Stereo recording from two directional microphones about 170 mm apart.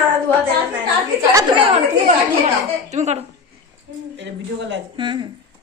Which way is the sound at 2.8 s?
40° right (ahead or behind).